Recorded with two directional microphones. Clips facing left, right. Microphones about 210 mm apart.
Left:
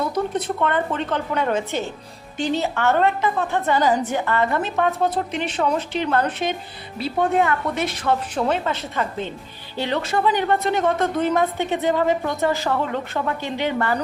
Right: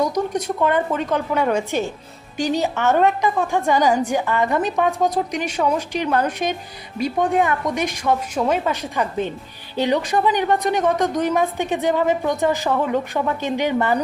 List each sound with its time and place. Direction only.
0.3 s a woman's voice: 10° right (ahead or behind)